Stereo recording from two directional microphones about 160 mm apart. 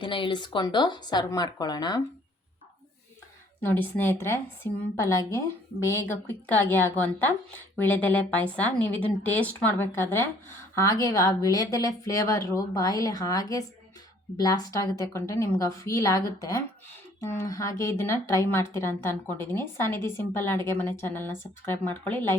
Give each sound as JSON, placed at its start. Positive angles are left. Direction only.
{"t": 0.0, "sound": "speech", "side_deg": 30}
{"t": 3.6, "sound": "a woman's voice", "side_deg": 10}